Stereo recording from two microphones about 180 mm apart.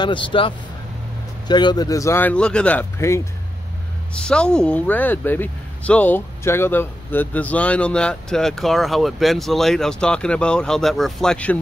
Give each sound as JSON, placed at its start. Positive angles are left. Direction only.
{"t": 0.0, "sound": "speech", "side_deg": 25}